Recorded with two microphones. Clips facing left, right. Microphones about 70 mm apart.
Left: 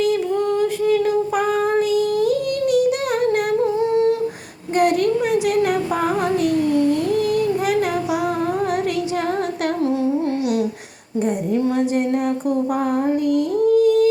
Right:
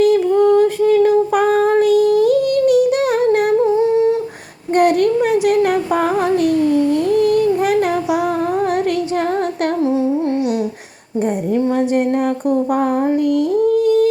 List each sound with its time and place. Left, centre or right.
0.0 s female singing: right
1.8 s humming: right
3.2 s humming: right
4.7 s child singing: right
9.8 s humming: right
11.5 s a sound: right